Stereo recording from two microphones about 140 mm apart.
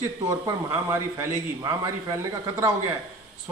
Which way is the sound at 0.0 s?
25° right (ahead or behind).